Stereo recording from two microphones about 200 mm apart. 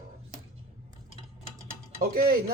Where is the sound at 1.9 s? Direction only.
45° right (ahead or behind).